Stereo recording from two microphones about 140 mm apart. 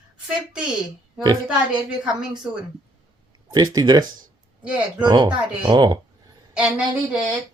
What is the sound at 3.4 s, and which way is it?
Speech, 30° right (ahead or behind).